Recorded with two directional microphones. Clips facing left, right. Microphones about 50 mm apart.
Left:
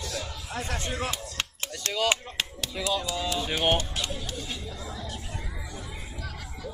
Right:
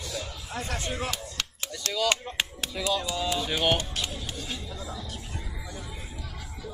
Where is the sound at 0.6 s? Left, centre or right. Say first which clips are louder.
Even; left.